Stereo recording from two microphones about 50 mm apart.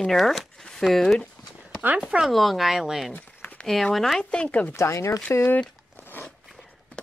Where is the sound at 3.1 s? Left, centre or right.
Left.